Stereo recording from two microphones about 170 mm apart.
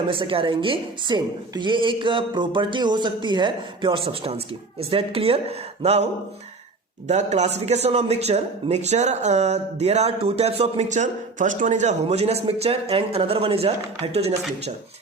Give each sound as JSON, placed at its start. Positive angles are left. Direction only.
{"t": 0.1, "sound": "a woman's voice", "side_deg": -30}
{"t": 7.1, "sound": "speech", "side_deg": -40}